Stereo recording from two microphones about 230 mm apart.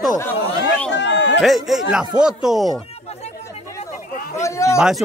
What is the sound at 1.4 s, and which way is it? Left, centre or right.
Speech, centre.